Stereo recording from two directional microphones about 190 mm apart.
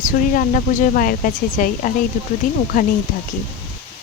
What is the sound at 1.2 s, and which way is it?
Speech, 45° left (ahead or behind).